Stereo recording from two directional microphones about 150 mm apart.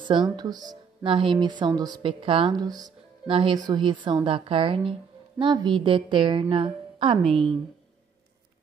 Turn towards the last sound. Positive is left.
turn(degrees=-35)  # may be behind; listen again after turning